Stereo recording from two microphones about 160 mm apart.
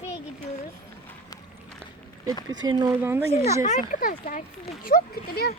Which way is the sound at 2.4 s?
25° right (ahead or behind).